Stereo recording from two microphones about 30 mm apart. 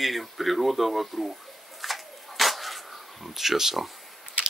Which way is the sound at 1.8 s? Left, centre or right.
Centre.